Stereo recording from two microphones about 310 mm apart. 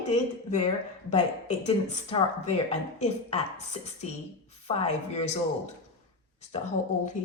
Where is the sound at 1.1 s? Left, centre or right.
Left.